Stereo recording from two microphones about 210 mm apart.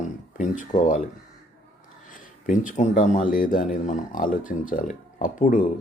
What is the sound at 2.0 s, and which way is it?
Speech, 40° left (ahead or behind).